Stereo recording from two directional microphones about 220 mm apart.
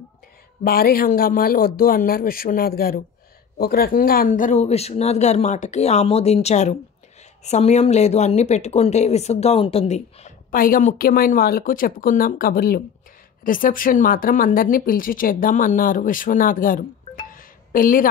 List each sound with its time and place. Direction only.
0.7 s speech: 40° left (ahead or behind)